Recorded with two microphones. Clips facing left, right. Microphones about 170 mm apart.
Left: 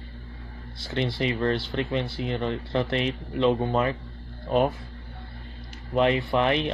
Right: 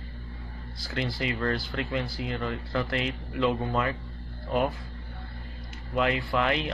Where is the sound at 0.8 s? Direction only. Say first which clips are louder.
Left 4 dB; 25° left (ahead or behind).